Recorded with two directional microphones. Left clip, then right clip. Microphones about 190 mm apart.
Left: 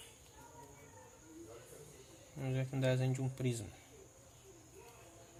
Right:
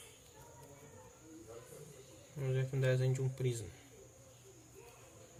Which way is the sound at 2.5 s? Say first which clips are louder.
Right 1 dB; 50° left (ahead or behind).